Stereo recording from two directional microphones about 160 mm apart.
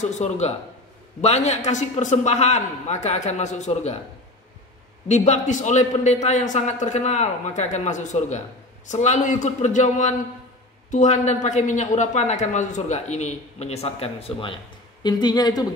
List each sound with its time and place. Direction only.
0.0 s speech: 45° left (ahead or behind)
5.0 s speech: 45° left (ahead or behind)
15.0 s speech: 25° left (ahead or behind)